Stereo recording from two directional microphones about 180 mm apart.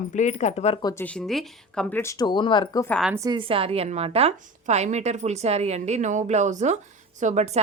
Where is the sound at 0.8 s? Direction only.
20° left (ahead or behind).